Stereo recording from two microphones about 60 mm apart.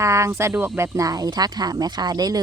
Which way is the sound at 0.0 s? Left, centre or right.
Right.